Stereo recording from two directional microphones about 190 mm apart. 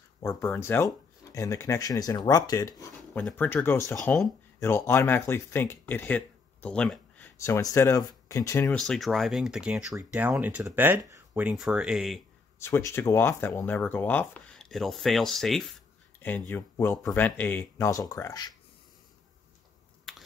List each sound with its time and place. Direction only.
0.2 s speech: 15° left (ahead or behind)
3.0 s speech: 5° left (ahead or behind)
8.6 s speech: centre (ahead or behind)
12.5 s speech: 15° left (ahead or behind)